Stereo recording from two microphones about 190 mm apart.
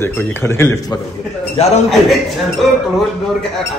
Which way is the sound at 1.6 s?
35° left (ahead or behind).